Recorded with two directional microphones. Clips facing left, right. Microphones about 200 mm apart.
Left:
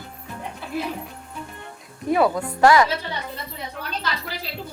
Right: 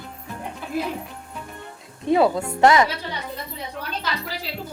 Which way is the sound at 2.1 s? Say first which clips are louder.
Right 1 dB; 25° right (ahead or behind).